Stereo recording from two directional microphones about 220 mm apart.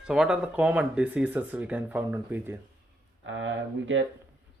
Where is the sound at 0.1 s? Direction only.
5° right (ahead or behind).